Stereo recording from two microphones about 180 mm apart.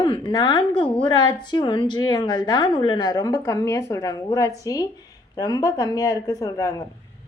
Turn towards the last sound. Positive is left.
turn(degrees=20)  # may be behind; listen again after turning